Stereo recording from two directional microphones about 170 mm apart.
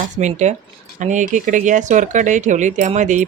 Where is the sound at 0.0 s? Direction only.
45° right (ahead or behind).